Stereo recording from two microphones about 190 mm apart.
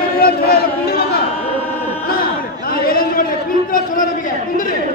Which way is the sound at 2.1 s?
50° left (ahead or behind).